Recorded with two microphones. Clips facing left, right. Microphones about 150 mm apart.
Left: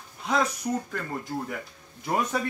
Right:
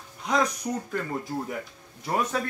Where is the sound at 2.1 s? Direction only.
10° left (ahead or behind).